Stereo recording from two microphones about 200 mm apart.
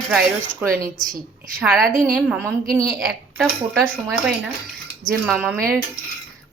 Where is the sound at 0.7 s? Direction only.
45° right (ahead or behind).